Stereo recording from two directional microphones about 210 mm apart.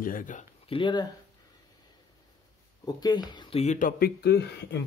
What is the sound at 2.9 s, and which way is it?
Speech, 20° left (ahead or behind).